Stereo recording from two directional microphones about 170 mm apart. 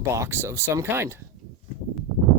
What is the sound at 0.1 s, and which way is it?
Speech, 15° right (ahead or behind).